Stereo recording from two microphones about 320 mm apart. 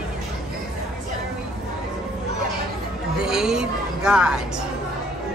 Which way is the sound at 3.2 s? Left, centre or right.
Centre.